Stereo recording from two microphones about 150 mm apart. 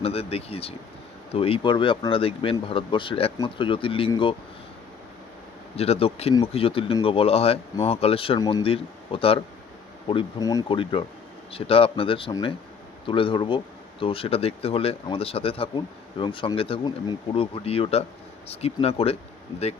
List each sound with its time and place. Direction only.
0.0 s speech: 40° left (ahead or behind)
5.7 s speech: 40° left (ahead or behind)
8.4 s speech: 25° left (ahead or behind)
8.6 s speech: 40° left (ahead or behind)
10.4 s speech: 25° left (ahead or behind)
10.7 s speech: 35° left (ahead or behind)